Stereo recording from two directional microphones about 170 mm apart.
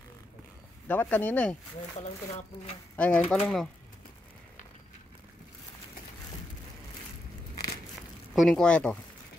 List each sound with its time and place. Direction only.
0.8 s speech: 10° left (ahead or behind)
2.0 s speech: 40° left (ahead or behind)
3.0 s speech: 5° left (ahead or behind)
8.4 s speech: centre (ahead or behind)